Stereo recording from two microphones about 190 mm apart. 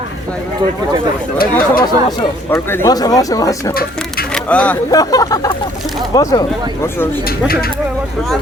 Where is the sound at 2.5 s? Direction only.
15° left (ahead or behind).